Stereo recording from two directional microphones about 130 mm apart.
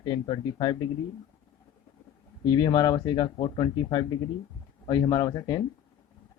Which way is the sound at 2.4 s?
30° left (ahead or behind).